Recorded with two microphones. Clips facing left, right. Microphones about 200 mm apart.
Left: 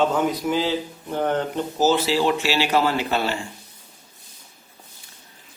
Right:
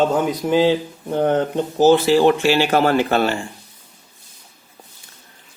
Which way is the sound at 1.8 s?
55° right (ahead or behind).